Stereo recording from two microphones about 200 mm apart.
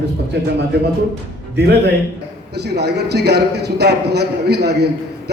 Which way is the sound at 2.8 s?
55° right (ahead or behind).